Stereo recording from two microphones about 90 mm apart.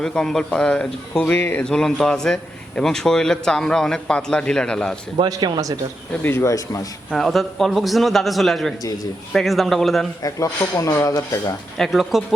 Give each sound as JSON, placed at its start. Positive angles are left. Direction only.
{"t": 0.0, "sound": "a man's voice", "side_deg": 5}
{"t": 1.4, "sound": "speech", "side_deg": 25}
{"t": 1.6, "sound": "a man's voice", "side_deg": 5}
{"t": 5.2, "sound": "speech", "side_deg": -50}
{"t": 6.2, "sound": "speech", "side_deg": 30}
{"t": 7.1, "sound": "a man's voice", "side_deg": 0}
{"t": 10.2, "sound": "speech", "side_deg": 40}
{"t": 11.8, "sound": "a man's voice", "side_deg": 0}